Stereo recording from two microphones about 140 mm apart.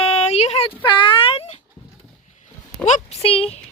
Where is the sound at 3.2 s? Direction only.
45° left (ahead or behind).